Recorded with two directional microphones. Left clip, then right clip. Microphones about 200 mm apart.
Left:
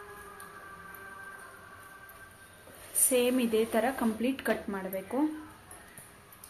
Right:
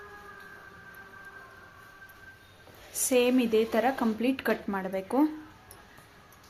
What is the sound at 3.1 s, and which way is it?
Speech, 25° right (ahead or behind).